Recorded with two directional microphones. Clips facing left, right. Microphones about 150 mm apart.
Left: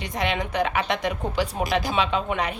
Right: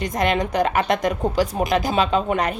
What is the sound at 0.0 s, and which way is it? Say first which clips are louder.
A woman's voice: right 6 dB; 45° right (ahead or behind).